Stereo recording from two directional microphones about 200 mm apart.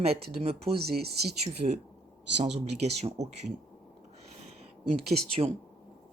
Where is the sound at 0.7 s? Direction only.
50° right (ahead or behind).